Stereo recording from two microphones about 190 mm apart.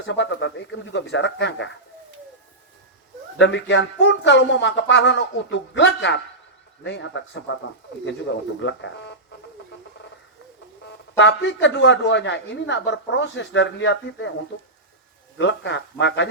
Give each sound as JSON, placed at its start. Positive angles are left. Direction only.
{"t": 0.0, "sound": "speech", "side_deg": 70}
{"t": 3.3, "sound": "speech", "side_deg": 70}
{"t": 11.2, "sound": "speech", "side_deg": 70}
{"t": 15.4, "sound": "speech", "side_deg": 70}